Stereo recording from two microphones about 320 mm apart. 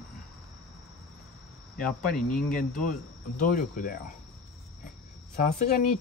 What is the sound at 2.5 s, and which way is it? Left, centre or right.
Speech, left.